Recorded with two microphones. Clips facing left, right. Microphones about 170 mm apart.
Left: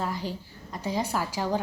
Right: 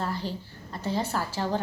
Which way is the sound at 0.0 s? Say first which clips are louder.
Even; 10° left (ahead or behind).